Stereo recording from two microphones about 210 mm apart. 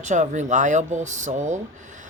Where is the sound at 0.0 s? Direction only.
35° right (ahead or behind).